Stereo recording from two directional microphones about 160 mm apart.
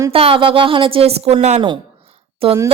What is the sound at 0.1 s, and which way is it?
A woman's voice, 35° right (ahead or behind).